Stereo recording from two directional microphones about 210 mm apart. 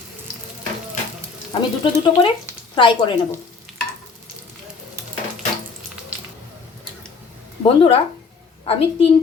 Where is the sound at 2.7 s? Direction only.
25° left (ahead or behind).